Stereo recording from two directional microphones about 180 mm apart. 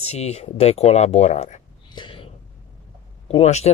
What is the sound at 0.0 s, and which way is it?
Speech, 35° left (ahead or behind).